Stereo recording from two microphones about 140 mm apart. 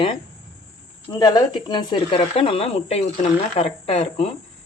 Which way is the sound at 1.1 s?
25° left (ahead or behind).